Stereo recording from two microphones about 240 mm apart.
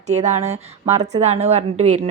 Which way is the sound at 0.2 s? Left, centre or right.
Right.